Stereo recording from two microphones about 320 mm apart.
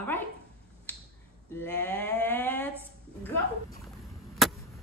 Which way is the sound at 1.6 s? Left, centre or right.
Centre.